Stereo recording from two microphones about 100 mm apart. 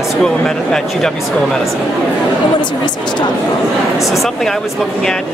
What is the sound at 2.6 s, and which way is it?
Speech, 50° left (ahead or behind).